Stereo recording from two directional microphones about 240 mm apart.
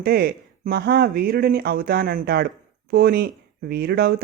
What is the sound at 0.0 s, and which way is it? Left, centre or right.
Speech, right.